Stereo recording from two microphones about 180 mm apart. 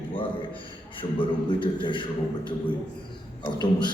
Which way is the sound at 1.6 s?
25° left (ahead or behind).